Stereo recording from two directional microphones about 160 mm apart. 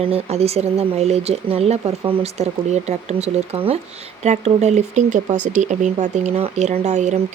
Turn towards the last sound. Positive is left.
turn(degrees=-45)  # may be behind; listen again after turning